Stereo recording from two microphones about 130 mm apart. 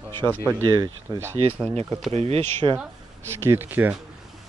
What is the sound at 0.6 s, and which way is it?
Speech, 30° right (ahead or behind).